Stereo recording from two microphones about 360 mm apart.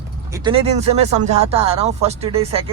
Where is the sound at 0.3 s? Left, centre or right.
Centre.